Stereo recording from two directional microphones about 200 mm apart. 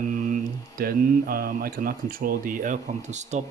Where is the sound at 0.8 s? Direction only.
45° right (ahead or behind).